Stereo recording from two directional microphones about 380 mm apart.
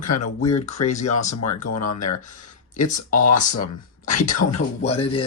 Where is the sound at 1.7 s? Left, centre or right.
Left.